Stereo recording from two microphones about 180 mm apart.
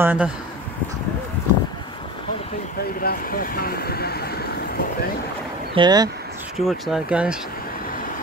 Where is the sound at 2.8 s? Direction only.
55° left (ahead or behind).